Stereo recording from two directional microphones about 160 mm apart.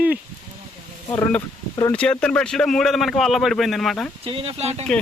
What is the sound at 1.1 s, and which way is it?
Speech, 15° left (ahead or behind).